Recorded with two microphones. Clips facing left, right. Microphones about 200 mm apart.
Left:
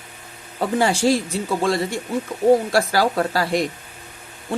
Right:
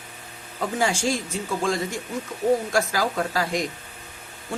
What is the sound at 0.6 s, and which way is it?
Speech, 35° left (ahead or behind).